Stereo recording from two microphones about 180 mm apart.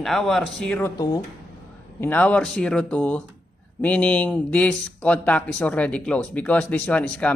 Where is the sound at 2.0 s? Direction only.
10° left (ahead or behind).